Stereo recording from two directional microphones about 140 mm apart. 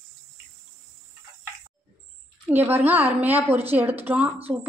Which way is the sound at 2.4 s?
15° right (ahead or behind).